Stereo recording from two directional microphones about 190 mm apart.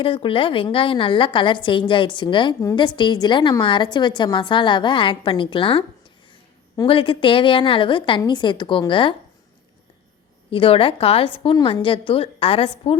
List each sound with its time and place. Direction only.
0.0 s a woman's voice: 30° left (ahead or behind)
10.5 s a woman's voice: 30° left (ahead or behind)